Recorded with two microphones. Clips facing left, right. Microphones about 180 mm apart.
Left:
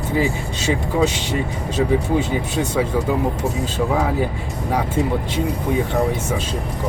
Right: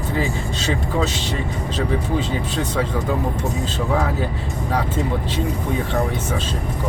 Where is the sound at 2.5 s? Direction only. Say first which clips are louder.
Left 3 dB; 10° left (ahead or behind).